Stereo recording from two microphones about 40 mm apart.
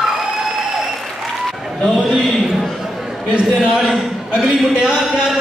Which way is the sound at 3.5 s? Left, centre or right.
Centre.